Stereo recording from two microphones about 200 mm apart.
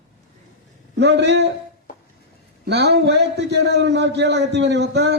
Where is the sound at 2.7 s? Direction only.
60° right (ahead or behind).